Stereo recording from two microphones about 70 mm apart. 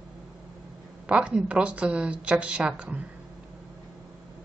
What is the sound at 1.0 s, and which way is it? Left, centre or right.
Speech, centre.